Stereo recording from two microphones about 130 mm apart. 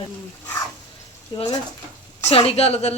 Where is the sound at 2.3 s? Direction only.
50° left (ahead or behind).